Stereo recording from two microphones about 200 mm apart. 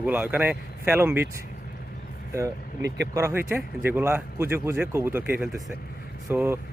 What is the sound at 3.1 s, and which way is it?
Speech, 15° right (ahead or behind).